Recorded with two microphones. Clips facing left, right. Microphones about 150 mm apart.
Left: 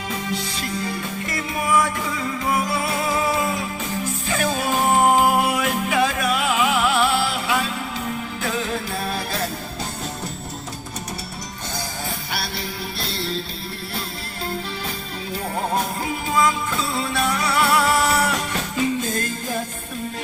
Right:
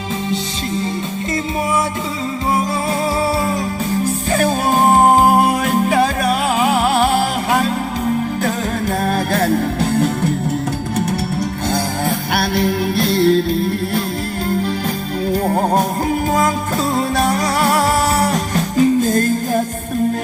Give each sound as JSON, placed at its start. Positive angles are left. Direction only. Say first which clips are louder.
{"t": 4.0, "sound": "music", "louder": "right 7 dB", "side_deg": -45}
{"t": 12.3, "sound": "music", "louder": "right 13 dB", "side_deg": -55}
{"t": 15.3, "sound": "music", "louder": "right 8 dB", "side_deg": -45}